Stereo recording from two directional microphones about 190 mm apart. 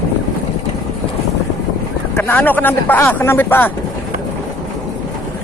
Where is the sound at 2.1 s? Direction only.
10° left (ahead or behind).